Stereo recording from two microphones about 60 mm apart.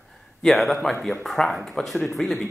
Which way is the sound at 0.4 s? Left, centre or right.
Centre.